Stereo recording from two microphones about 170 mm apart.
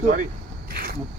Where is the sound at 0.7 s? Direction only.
60° right (ahead or behind).